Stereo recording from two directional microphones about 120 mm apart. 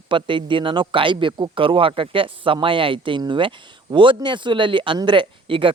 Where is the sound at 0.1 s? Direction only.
45° right (ahead or behind).